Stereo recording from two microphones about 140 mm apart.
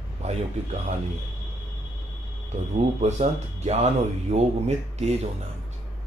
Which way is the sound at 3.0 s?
55° right (ahead or behind).